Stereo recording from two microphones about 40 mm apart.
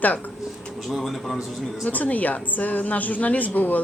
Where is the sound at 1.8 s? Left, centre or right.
Left.